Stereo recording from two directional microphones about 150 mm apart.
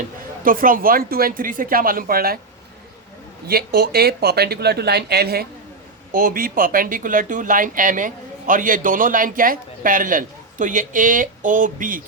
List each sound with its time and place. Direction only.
0.4 s a woman's voice: 70° right (ahead or behind)
3.4 s speech: 90° right
6.1 s speech: 70° right (ahead or behind)